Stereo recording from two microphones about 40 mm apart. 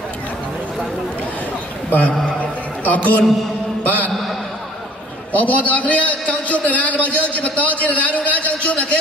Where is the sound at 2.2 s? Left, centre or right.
Left.